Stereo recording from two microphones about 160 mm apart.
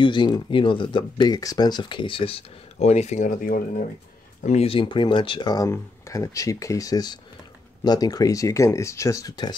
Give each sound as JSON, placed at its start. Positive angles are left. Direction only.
{"t": 0.0, "sound": "speech", "side_deg": 30}
{"t": 4.4, "sound": "speech", "side_deg": 45}